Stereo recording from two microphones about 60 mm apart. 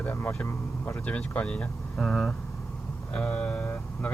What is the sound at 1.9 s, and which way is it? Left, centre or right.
Speech, centre.